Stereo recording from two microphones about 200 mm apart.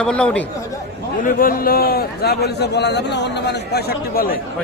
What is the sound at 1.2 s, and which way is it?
A man's voice, 45° left (ahead or behind).